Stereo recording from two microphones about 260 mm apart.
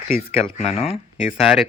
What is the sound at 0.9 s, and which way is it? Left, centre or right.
Speech, centre.